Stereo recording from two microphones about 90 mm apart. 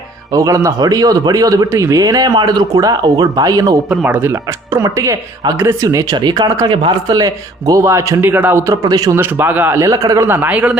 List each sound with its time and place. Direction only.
0.3 s speech: 40° right (ahead or behind)
4.0 s speech: 25° right (ahead or behind); by 6.1 s 40° right (ahead or behind)
6.1 s speech: 55° right (ahead or behind)
7.1 s a man's voice: 40° right (ahead or behind)
8.9 s speech: 45° right (ahead or behind)
9.1 s a man's voice: 20° right (ahead or behind); by 10.2 s 40° right (ahead or behind)
10.2 s speech: 25° right (ahead or behind)